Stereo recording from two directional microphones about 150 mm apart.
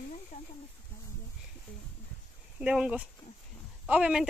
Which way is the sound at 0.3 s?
60° left (ahead or behind).